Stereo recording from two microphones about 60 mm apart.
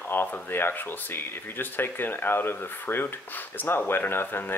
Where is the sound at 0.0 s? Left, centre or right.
Left.